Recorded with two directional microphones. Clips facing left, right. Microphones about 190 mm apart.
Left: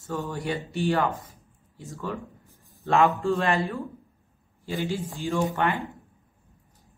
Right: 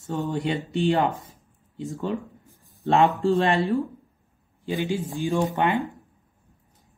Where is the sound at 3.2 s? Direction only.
30° right (ahead or behind).